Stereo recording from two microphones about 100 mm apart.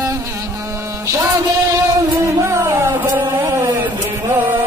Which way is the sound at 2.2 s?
30° right (ahead or behind).